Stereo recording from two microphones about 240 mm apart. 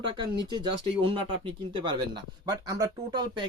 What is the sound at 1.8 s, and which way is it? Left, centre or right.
Speech, centre.